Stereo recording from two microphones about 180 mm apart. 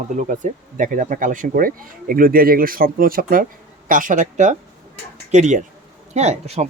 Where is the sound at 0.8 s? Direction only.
50° right (ahead or behind).